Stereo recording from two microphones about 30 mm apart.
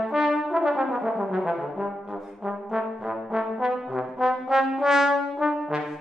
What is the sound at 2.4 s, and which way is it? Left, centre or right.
Trombone, centre.